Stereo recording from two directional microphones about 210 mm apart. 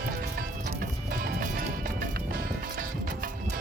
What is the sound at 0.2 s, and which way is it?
Music, 45° right (ahead or behind).